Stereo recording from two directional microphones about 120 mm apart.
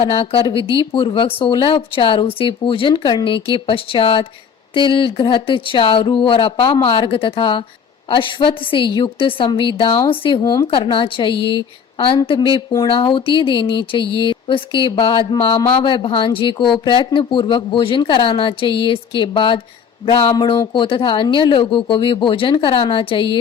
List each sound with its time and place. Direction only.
0.0 s speech: 45° left (ahead or behind)
20.3 s speech: 35° left (ahead or behind)